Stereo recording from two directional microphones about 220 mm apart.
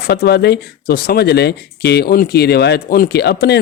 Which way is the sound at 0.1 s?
50° left (ahead or behind).